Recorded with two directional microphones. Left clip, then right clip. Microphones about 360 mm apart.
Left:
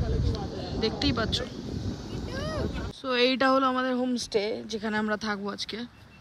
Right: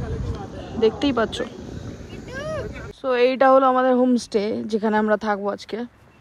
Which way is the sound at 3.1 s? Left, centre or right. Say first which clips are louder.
Right 8 dB; centre.